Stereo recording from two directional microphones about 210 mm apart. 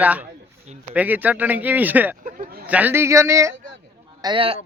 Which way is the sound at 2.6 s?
5° right (ahead or behind).